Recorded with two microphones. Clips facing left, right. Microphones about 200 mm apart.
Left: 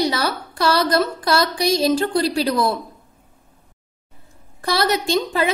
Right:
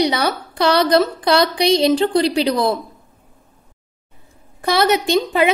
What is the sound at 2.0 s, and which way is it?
Speech, 20° right (ahead or behind).